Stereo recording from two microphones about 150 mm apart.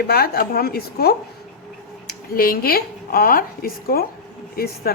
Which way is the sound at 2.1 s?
80° left.